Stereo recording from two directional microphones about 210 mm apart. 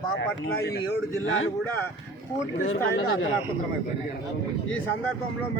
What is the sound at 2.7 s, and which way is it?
Speech, 70° left (ahead or behind).